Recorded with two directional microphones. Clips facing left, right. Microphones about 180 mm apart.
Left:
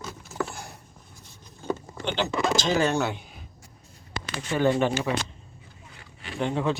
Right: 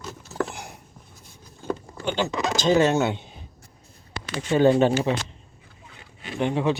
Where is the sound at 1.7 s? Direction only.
45° right (ahead or behind).